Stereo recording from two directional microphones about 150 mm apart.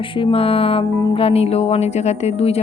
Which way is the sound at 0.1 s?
35° left (ahead or behind).